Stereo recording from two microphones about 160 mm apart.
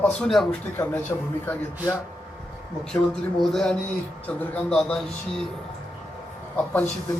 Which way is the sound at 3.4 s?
5° left (ahead or behind).